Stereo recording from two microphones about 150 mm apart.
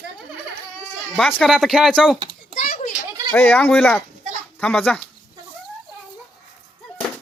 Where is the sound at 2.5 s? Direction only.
60° left (ahead or behind).